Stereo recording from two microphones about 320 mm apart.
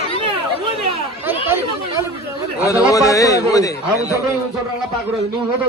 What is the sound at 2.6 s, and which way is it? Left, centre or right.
A man's voice, centre.